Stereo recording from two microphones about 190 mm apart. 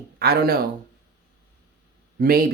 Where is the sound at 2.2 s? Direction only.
50° right (ahead or behind).